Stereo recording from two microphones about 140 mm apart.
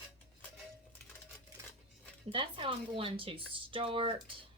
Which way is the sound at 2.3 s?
40° right (ahead or behind).